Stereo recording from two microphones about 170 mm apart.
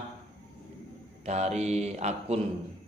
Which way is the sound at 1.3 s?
40° right (ahead or behind).